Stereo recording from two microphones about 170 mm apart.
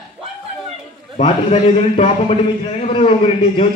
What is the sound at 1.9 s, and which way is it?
A man's voice, 35° left (ahead or behind).